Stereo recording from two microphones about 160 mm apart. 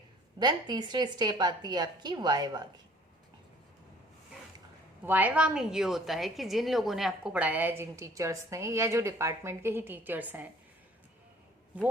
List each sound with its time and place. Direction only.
0.3 s a woman's voice: 25° right (ahead or behind)
5.0 s a woman's voice: 10° right (ahead or behind)
11.7 s a woman's voice: 10° right (ahead or behind)